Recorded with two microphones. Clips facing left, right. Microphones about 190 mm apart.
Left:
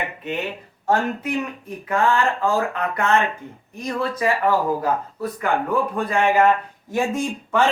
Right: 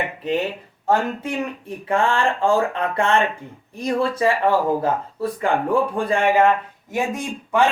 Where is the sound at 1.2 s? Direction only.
30° right (ahead or behind).